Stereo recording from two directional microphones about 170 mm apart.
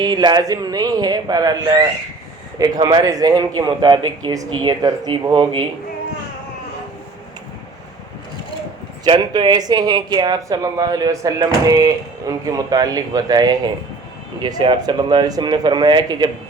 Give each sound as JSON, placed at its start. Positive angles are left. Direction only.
{"t": 0.0, "sound": "speech", "side_deg": -25}
{"t": 9.0, "sound": "speech", "side_deg": -25}